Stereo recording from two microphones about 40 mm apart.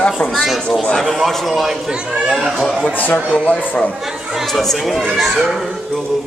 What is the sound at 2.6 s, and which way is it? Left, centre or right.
Speech, centre.